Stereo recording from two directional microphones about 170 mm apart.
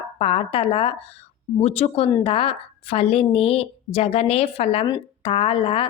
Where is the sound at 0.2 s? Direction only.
35° left (ahead or behind).